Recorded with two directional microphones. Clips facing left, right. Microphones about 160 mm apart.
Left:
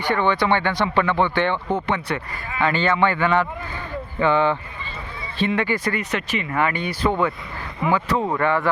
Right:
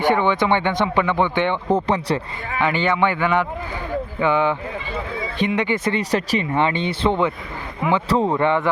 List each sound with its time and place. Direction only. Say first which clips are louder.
0.1 s speech: left 1 dB; 20° right (ahead or behind)
1.7 s speech: right 4 dB; 35° right (ahead or behind)
2.6 s speech: even; 15° right (ahead or behind)
6.0 s speech: right 5 dB; 35° right (ahead or behind)